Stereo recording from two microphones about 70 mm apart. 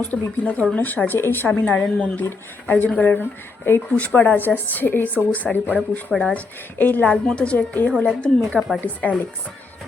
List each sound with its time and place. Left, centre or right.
0.0 s a woman's voice: left
8.5 s a woman's voice: centre
8.8 s speech: left